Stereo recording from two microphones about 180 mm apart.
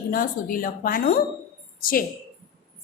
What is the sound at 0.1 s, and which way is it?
Speech, 50° left (ahead or behind).